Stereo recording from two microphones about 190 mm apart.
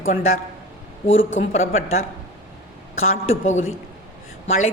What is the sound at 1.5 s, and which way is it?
Speech, 35° left (ahead or behind).